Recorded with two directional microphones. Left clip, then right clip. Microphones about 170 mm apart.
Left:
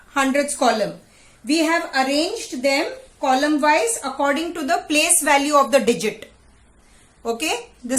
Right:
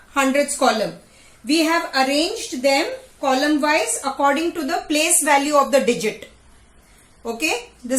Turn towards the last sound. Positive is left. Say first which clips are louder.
# right 1 dB
turn(degrees=20)  # may be behind; listen again after turning